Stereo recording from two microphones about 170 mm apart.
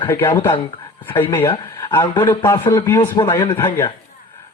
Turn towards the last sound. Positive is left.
turn(degrees=15)  # may be behind; listen again after turning